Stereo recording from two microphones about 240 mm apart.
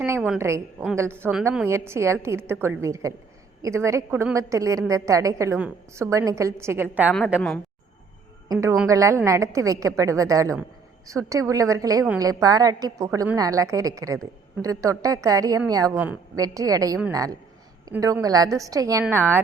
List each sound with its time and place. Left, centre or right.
0.0 s a woman's voice: centre